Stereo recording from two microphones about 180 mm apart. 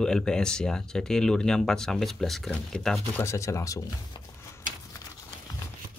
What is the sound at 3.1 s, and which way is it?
Speech, 15° left (ahead or behind).